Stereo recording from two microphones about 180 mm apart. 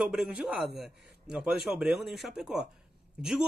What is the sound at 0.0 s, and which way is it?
Speech, 5° right (ahead or behind).